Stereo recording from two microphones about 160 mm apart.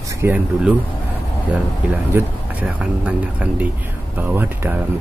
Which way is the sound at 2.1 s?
10° right (ahead or behind).